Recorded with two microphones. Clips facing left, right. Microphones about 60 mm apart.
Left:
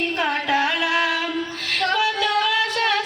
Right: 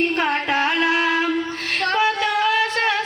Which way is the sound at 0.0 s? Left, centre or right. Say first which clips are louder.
Right 2 dB; right.